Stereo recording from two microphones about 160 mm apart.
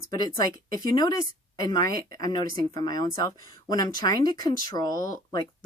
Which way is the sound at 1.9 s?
70° right (ahead or behind).